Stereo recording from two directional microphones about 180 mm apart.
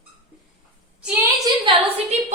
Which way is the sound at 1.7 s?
25° right (ahead or behind).